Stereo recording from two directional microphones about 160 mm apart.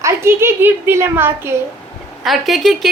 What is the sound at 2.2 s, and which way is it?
Speech, centre (ahead or behind).